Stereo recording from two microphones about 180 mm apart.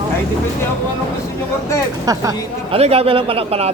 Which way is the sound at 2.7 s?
35° right (ahead or behind).